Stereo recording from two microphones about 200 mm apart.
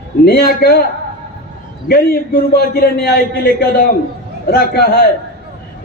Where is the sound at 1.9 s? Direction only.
50° left (ahead or behind).